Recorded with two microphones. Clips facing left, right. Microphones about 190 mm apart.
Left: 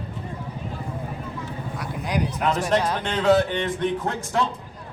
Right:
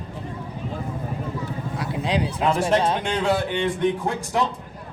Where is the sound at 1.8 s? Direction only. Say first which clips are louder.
Right 2 dB; 25° right (ahead or behind).